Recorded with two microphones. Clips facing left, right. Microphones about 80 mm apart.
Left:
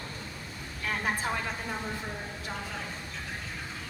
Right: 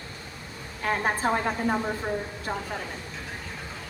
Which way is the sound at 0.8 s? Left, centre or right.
Right.